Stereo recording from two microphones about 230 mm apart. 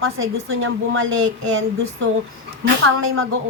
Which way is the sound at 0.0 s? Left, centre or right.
Right.